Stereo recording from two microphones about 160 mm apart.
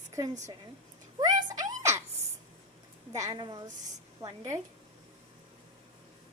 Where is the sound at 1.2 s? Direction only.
25° right (ahead or behind).